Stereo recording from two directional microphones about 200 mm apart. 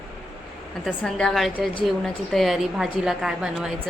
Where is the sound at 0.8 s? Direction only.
Centre (ahead or behind).